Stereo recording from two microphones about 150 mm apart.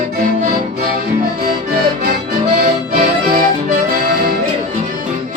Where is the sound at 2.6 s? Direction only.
70° right (ahead or behind).